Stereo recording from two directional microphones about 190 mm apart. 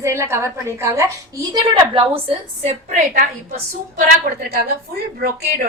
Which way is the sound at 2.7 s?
40° right (ahead or behind).